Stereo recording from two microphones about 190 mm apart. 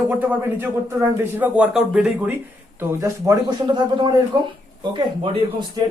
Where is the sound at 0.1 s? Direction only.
10° right (ahead or behind).